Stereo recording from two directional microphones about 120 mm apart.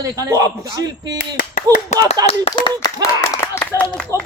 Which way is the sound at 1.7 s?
30° right (ahead or behind).